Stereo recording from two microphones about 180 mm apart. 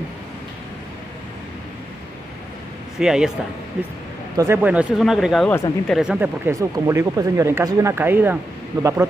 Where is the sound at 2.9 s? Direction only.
5° right (ahead or behind).